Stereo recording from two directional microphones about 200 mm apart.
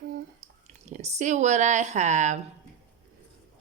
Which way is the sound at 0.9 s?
35° right (ahead or behind).